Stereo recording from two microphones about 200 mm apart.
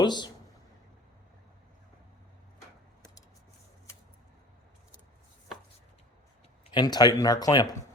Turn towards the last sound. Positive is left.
turn(degrees=20)  # may be behind; listen again after turning